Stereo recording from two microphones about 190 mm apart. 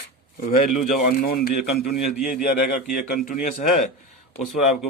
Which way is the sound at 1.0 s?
50° left (ahead or behind).